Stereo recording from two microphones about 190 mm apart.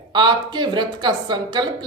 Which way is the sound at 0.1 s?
25° right (ahead or behind).